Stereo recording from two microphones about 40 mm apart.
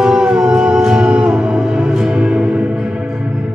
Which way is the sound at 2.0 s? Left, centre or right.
Centre.